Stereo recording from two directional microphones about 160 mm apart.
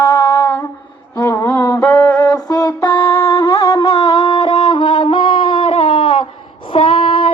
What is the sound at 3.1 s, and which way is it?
Music, 15° left (ahead or behind).